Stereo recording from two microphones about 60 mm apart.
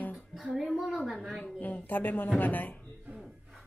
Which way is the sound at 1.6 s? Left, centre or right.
Left.